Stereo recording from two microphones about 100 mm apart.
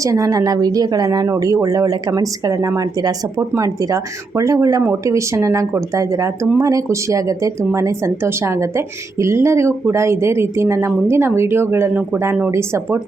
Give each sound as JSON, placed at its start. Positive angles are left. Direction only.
{"t": 0.0, "sound": "speech", "side_deg": -35}